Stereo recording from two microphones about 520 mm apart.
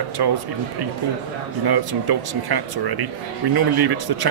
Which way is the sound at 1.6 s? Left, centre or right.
Right.